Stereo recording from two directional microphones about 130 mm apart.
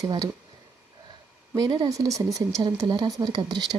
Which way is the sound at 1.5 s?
30° right (ahead or behind).